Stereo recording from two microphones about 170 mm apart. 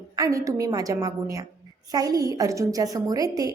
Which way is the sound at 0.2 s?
20° right (ahead or behind).